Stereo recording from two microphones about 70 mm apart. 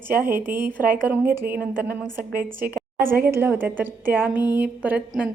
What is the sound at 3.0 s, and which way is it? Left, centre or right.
A woman's voice, right.